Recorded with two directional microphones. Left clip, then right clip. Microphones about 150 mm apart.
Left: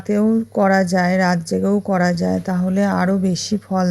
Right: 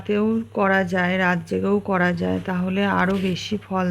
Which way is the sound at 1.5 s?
20° left (ahead or behind).